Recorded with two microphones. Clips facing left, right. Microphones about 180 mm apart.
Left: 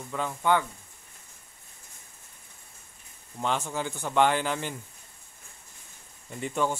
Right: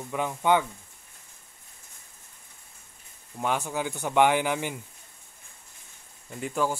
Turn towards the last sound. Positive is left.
turn(degrees=-5)  # may be behind; listen again after turning